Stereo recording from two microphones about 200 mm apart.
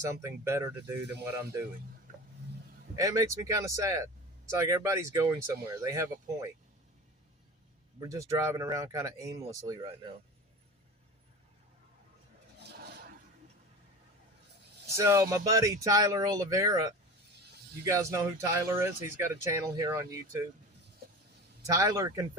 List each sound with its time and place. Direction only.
0.1 s speech: 15° right (ahead or behind)
2.9 s speech: 15° right (ahead or behind)
7.9 s speech: 15° right (ahead or behind)
12.5 s a sound: 55° right (ahead or behind)
14.9 s speech: 15° right (ahead or behind)
21.7 s speech: 15° right (ahead or behind)